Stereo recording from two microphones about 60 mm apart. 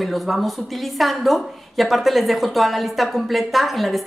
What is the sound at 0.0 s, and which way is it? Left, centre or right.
A woman's voice, centre.